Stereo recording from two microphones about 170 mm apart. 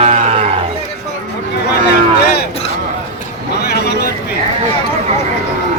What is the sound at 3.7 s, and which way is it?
Vehicle, 75° left (ahead or behind).